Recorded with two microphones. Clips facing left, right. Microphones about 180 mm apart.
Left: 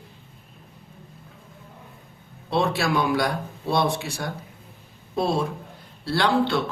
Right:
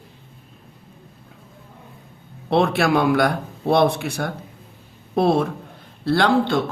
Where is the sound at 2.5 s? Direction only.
55° right (ahead or behind).